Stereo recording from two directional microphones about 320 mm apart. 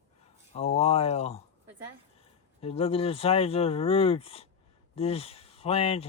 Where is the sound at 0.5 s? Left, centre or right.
Centre.